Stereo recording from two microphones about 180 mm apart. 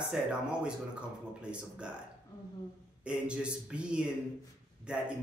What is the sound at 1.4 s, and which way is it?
Speech, 5° right (ahead or behind).